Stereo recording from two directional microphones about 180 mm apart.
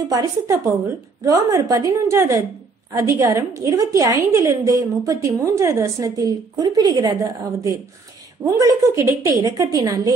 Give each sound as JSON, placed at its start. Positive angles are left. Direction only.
{"t": 0.1, "sound": "a woman's voice", "side_deg": -20}